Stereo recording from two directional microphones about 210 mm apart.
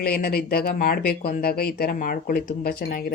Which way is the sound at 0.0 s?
45° left (ahead or behind).